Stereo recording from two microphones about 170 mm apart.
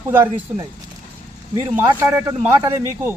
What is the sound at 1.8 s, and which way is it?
Speech, 15° right (ahead or behind).